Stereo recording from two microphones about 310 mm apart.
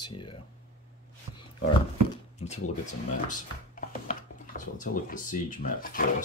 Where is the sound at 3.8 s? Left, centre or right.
Left.